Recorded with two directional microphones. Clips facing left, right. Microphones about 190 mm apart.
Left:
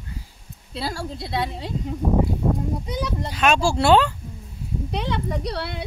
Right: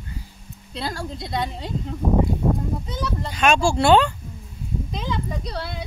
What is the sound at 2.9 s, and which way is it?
Speech, 15° left (ahead or behind).